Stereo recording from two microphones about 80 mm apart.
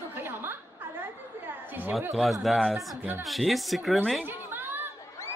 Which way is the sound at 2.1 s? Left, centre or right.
Centre.